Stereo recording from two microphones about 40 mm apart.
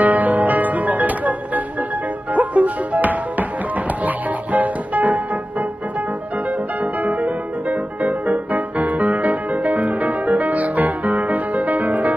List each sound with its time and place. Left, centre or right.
0.0 s music: right
6.8 s music: right